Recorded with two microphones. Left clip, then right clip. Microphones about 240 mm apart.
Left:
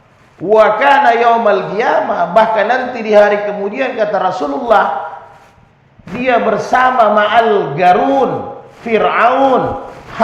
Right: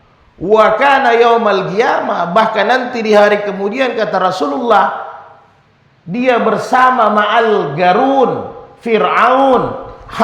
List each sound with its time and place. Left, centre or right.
0.4 s a man's voice: right
6.1 s a man's voice: right
10.1 s a man's voice: right